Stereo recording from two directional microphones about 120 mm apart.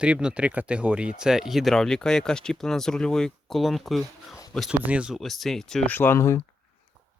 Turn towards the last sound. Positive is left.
turn(degrees=25)  # may be behind; listen again after turning